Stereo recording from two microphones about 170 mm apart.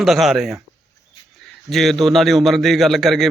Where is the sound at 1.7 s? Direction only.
Centre (ahead or behind).